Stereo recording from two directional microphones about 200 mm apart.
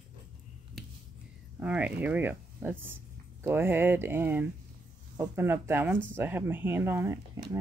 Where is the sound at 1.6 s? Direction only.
10° right (ahead or behind).